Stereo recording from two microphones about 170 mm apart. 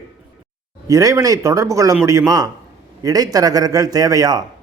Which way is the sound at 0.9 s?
20° right (ahead or behind).